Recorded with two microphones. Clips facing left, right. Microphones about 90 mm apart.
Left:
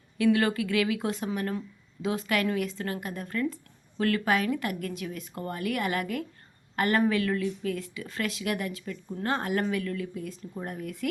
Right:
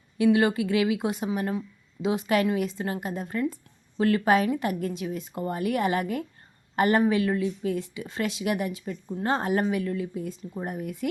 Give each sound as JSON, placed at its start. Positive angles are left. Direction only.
{"t": 0.2, "sound": "speech", "side_deg": -20}